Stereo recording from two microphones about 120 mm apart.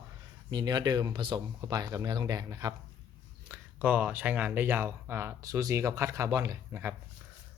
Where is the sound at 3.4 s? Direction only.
10° right (ahead or behind).